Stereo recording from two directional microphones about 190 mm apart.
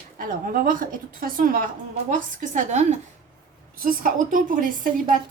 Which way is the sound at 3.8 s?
45° right (ahead or behind).